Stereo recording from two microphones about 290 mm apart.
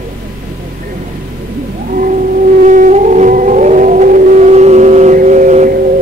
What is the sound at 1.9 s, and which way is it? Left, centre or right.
Howl, right.